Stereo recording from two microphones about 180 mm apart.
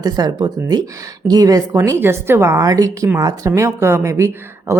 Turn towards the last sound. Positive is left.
turn(degrees=-15)  # may be behind; listen again after turning